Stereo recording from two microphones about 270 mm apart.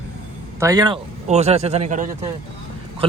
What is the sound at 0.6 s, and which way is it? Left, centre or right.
Speech, centre.